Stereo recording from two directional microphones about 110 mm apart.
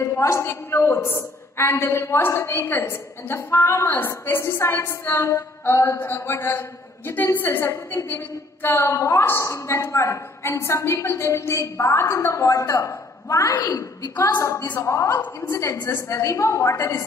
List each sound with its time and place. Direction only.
0.0 s a woman's voice: 25° left (ahead or behind)